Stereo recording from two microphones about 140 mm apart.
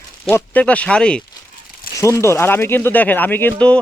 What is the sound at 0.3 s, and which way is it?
Speech, 15° left (ahead or behind).